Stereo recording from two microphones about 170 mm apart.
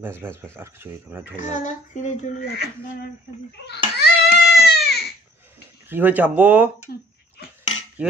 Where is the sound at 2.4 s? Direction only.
70° left (ahead or behind).